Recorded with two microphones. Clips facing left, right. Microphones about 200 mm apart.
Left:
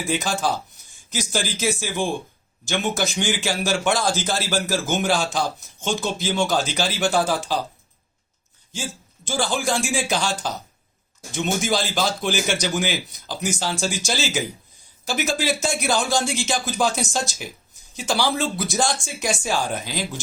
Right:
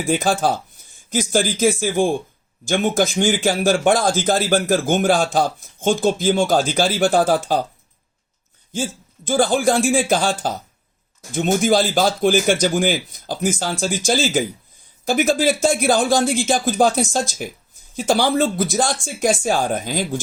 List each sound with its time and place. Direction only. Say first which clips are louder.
0.1 s speech: right 5 dB; 55° right (ahead or behind)
8.7 s speech: right 7 dB; 50° right (ahead or behind)